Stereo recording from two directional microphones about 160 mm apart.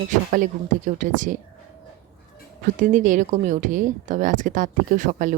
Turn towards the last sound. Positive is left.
turn(degrees=-55)  # may be behind; listen again after turning